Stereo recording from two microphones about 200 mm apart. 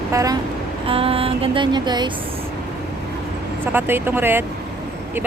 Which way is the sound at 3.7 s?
10° right (ahead or behind).